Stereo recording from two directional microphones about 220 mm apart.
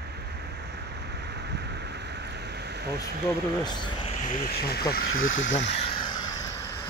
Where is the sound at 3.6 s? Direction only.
20° left (ahead or behind).